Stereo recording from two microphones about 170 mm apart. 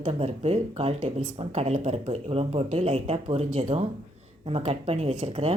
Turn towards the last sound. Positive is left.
turn(degrees=-35)  # may be behind; listen again after turning